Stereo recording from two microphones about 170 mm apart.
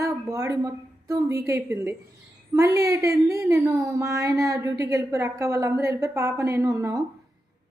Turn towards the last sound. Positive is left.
turn(degrees=-15)  # may be behind; listen again after turning